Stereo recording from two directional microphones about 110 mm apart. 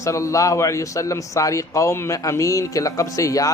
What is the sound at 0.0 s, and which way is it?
Speech, 30° left (ahead or behind).